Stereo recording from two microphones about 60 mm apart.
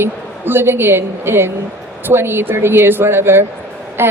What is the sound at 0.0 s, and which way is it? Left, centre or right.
A woman's voice, right.